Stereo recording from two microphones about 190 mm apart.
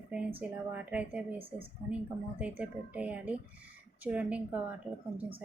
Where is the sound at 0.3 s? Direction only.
10° right (ahead or behind).